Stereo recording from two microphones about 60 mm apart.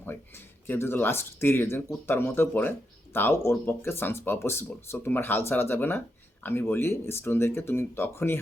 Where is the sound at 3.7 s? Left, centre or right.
Left.